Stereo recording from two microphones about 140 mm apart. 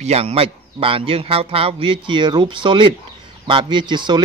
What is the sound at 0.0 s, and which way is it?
Speech, 45° right (ahead or behind).